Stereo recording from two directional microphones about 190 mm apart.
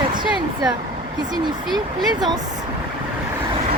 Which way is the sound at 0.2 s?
25° right (ahead or behind).